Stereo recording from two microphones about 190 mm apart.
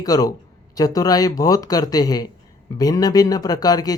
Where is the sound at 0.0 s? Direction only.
20° left (ahead or behind).